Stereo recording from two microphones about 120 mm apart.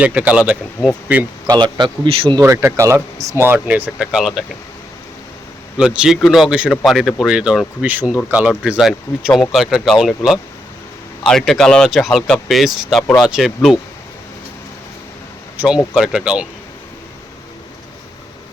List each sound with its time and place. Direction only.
0.0 s speech: 10° right (ahead or behind)
1.5 s speech: 40° right (ahead or behind)
2.4 s speech: 20° right (ahead or behind); by 4.4 s 5° right (ahead or behind)
5.7 s speech: 10° right (ahead or behind)
15.5 s speech: 10° right (ahead or behind)